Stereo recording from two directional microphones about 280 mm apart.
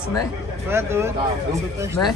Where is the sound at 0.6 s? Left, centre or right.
Centre.